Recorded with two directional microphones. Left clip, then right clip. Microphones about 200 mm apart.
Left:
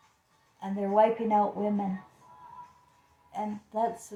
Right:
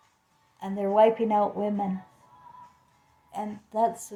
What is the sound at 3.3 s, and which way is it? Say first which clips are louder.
Speech: right 2 dB; 55° right (ahead or behind).